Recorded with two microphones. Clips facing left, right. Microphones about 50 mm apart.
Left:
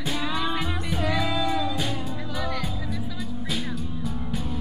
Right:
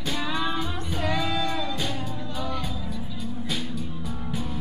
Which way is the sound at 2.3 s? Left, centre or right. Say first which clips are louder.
Left 1 dB; left.